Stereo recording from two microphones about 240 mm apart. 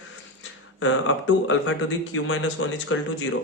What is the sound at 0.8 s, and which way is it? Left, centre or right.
A man's voice, left.